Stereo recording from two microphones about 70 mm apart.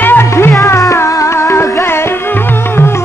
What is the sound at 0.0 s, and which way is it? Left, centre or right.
Music, left.